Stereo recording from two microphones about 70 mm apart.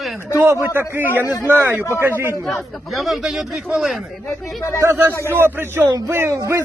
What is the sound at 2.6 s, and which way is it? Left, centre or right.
A man's voice, centre.